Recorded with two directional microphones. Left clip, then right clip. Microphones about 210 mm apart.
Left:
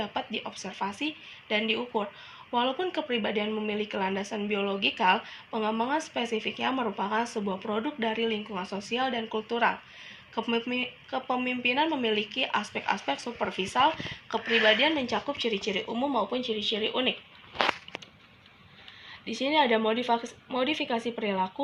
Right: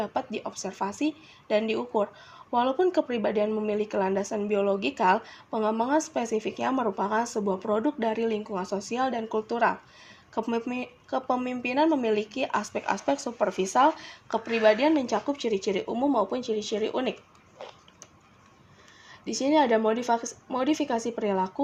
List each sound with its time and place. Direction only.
0.0 s a woman's voice: 55° right (ahead or behind)
19.2 s a woman's voice: 55° right (ahead or behind)